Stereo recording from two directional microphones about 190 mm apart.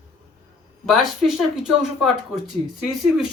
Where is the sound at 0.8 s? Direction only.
Centre (ahead or behind).